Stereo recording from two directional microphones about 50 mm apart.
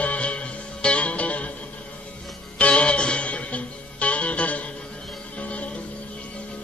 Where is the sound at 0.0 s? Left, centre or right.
Left.